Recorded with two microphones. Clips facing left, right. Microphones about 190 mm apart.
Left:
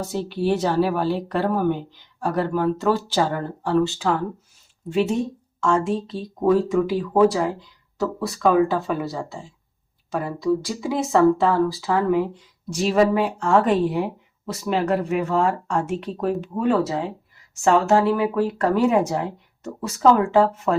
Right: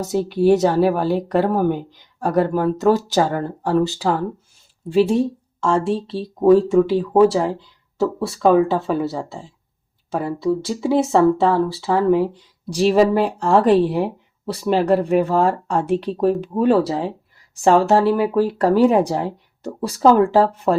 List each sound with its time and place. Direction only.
0.0 s speech: 45° right (ahead or behind)
10.4 s speech: 30° right (ahead or behind)